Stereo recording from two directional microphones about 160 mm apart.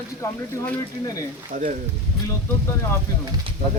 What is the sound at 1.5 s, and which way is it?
Speech, 55° right (ahead or behind).